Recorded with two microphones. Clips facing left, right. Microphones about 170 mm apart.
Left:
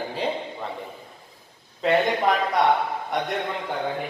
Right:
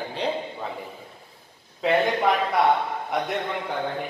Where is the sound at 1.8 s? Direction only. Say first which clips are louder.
Even; centre (ahead or behind).